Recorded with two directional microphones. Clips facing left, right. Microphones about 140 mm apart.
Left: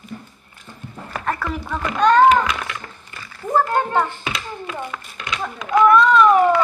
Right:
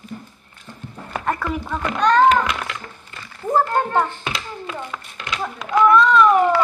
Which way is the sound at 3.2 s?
25° right (ahead or behind).